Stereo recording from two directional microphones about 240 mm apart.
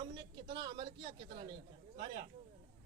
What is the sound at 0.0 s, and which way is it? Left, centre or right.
Speech, centre.